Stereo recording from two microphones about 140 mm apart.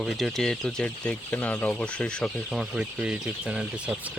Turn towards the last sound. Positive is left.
turn(degrees=-5)  # may be behind; listen again after turning